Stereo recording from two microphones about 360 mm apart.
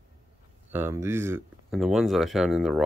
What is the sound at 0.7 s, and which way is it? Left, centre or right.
Speech, centre.